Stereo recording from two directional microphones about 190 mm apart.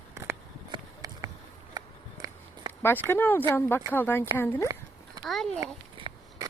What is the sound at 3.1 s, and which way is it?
Speech, 10° left (ahead or behind).